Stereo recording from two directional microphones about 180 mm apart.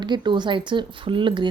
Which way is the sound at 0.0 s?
25° right (ahead or behind).